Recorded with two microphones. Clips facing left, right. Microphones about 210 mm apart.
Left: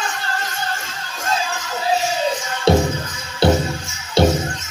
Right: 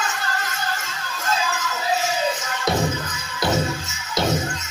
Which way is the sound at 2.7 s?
30° left (ahead or behind).